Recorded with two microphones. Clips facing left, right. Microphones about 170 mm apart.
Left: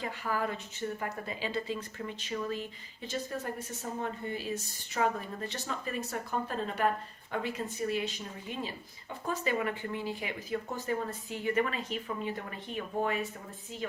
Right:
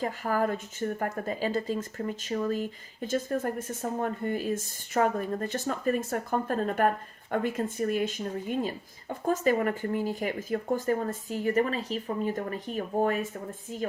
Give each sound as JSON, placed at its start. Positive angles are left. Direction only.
{"t": 0.0, "sound": "speech", "side_deg": -45}